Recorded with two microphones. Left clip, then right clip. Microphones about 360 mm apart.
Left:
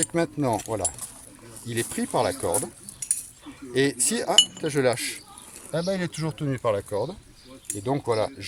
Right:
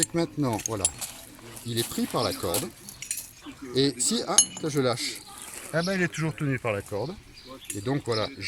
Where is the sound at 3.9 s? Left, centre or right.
Left.